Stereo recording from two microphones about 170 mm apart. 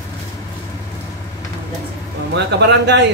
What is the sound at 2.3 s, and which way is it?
Speech, 85° right.